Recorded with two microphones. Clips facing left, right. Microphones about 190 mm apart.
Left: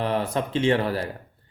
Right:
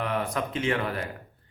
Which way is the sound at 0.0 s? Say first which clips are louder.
Left 4 dB; 30° left (ahead or behind).